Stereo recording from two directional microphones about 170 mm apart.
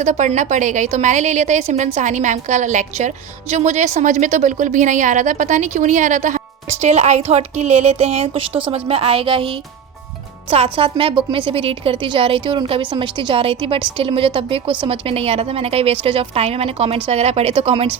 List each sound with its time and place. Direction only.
0.0 s a woman's voice: 45° right (ahead or behind)